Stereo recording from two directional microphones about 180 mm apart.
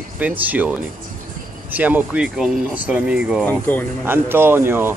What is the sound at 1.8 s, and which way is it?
Speech, 10° right (ahead or behind).